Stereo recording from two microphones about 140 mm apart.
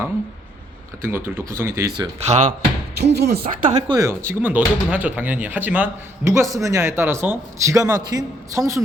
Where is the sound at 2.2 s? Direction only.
55° right (ahead or behind).